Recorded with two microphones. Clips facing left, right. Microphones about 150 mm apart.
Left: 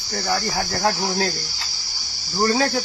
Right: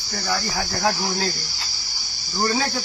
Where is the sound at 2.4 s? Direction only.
50° left (ahead or behind).